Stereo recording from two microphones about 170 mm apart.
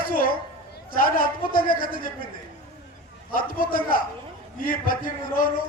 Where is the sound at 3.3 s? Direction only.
55° left (ahead or behind).